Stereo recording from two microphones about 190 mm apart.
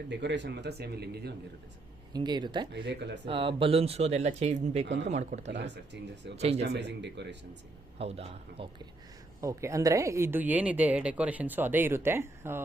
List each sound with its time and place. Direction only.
0.1 s speech: 65° right (ahead or behind)
2.1 s speech: 20° right (ahead or behind)
2.7 s speech: 65° right (ahead or behind)
3.2 s speech: 30° right (ahead or behind)
5.5 s speech: 65° right (ahead or behind)
6.3 s speech: 35° right (ahead or behind)
6.6 s speech: 65° right (ahead or behind)
7.9 s speech: 30° right (ahead or behind)
9.4 s a woman's voice: 15° right (ahead or behind)